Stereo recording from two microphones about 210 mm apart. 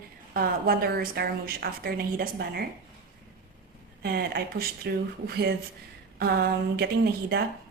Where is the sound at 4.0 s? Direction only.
45° right (ahead or behind).